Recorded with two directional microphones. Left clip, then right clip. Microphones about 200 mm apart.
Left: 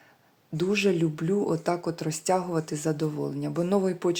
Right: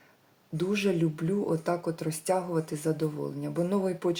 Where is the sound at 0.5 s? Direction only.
25° left (ahead or behind).